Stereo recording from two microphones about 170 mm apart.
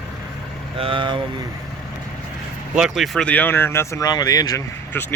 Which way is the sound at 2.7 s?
5° right (ahead or behind).